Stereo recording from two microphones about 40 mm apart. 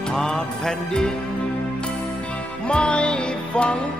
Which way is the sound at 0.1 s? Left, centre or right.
Centre.